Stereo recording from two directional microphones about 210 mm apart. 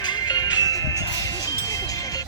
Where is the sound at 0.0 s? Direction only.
20° left (ahead or behind).